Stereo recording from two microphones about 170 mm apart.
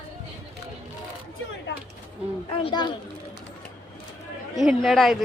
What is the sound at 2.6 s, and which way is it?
Speech, 25° left (ahead or behind).